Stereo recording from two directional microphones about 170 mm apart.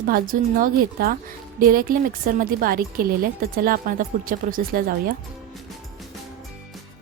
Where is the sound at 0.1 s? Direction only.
55° right (ahead or behind).